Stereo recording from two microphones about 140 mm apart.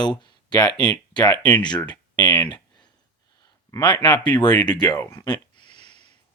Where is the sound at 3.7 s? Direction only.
30° left (ahead or behind).